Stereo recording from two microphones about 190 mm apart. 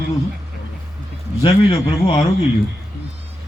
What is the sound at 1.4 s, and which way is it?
Speech, 25° left (ahead or behind).